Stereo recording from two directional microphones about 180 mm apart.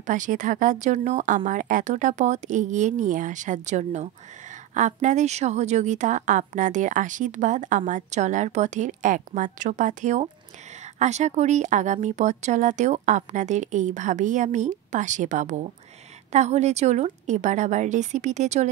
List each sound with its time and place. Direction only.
0.0 s speech: 45° right (ahead or behind)